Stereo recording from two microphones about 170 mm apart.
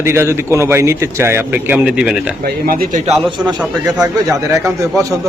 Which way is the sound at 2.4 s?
60° right (ahead or behind).